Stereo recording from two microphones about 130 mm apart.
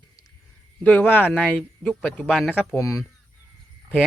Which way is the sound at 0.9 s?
15° left (ahead or behind).